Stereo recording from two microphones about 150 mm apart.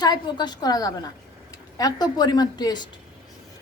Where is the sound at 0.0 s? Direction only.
25° left (ahead or behind).